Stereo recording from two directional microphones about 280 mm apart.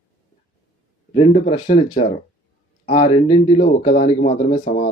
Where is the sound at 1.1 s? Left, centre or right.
Left.